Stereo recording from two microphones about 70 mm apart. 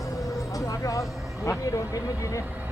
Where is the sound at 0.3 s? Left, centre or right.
Left.